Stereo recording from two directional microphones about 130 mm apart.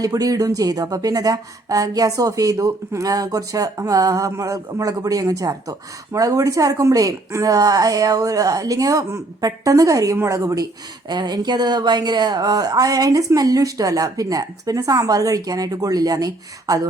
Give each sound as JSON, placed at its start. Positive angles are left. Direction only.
{"t": 0.0, "sound": "speech", "side_deg": -30}